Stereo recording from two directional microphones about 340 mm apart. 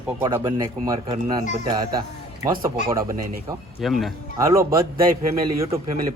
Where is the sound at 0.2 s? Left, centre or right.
Centre.